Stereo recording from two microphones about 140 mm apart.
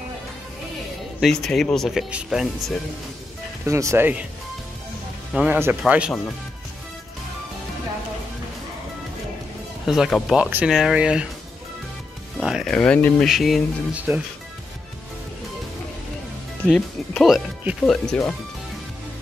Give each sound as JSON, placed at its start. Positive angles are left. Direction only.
{"t": 1.2, "sound": "speech", "side_deg": 5}
{"t": 3.6, "sound": "speech", "side_deg": -20}
{"t": 5.3, "sound": "speech", "side_deg": -5}
{"t": 9.8, "sound": "speech", "side_deg": -5}
{"t": 12.4, "sound": "speech", "side_deg": 0}
{"t": 16.6, "sound": "speech", "side_deg": 5}